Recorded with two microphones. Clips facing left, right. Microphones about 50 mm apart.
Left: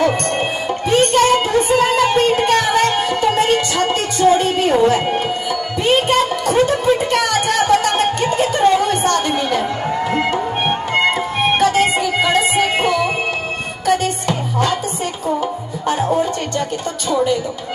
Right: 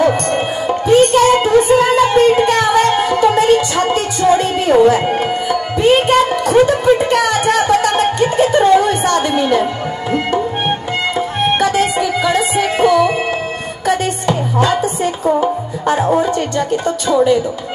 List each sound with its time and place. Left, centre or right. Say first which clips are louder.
0.0 s music: right 3 dB; right
0.8 s music: right 4 dB; left
1.2 s music: right 4 dB; right
3.3 s music: right 4 dB; left
3.7 s music: right 2 dB; right
5.1 s tabla: right 3 dB; right
5.9 s music: right 3 dB; right
11.3 s music: right 2 dB; right
11.7 s music: right 1 dB; left
13.8 s music: right 1 dB; right